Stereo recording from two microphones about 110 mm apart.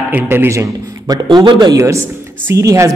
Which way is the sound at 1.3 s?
45° right (ahead or behind).